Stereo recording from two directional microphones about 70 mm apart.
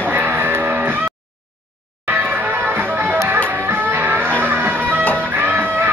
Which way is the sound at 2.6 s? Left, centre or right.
Right.